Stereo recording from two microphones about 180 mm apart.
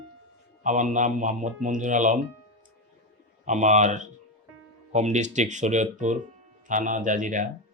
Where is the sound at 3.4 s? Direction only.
40° right (ahead or behind).